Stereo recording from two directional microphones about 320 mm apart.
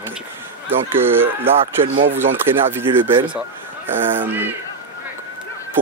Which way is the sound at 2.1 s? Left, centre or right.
Centre.